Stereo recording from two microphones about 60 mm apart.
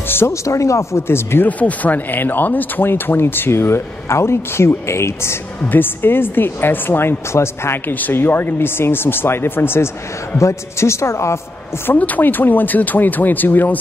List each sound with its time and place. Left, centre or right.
0.3 s speech: left
1.6 s speech: left
5.7 s speech: left
10.3 s a man's voice: left
12.0 s speech: left